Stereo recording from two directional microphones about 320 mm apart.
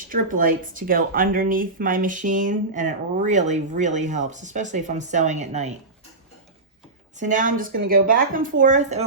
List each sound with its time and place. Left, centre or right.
0.1 s speech: right
7.2 s speech: right